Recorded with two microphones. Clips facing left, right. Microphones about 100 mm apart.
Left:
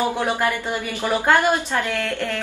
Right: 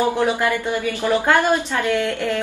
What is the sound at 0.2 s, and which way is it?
A woman's voice, 15° left (ahead or behind).